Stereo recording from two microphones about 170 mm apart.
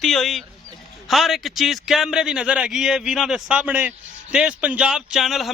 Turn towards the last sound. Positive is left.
turn(degrees=0)  # may be behind; listen again after turning